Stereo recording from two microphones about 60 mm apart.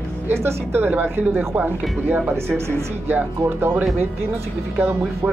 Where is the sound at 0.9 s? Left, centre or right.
Right.